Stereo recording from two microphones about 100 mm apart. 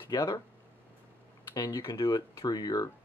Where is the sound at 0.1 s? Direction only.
35° left (ahead or behind).